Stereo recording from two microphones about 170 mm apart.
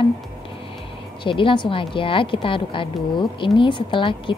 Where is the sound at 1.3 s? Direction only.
30° left (ahead or behind).